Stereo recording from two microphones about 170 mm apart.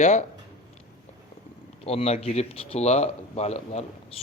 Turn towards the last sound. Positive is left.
turn(degrees=40)  # may be behind; listen again after turning